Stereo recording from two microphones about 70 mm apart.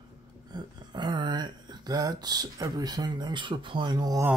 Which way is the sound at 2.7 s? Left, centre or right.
Right.